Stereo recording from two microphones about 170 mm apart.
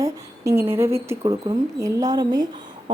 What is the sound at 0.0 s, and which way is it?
Speech, 15° right (ahead or behind).